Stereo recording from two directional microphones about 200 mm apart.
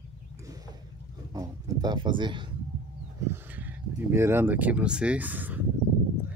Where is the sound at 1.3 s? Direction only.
20° right (ahead or behind).